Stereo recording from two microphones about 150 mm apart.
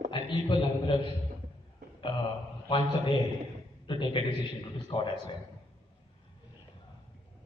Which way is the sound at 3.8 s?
30° left (ahead or behind).